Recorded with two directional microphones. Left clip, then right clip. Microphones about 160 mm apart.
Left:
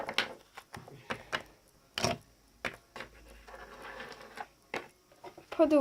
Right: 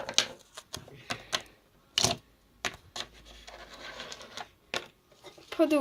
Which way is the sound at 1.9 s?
20° left (ahead or behind).